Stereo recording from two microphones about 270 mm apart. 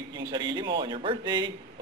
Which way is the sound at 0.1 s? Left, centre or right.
Centre.